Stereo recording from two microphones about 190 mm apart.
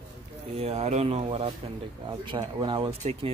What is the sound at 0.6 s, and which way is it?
Speech, 35° right (ahead or behind).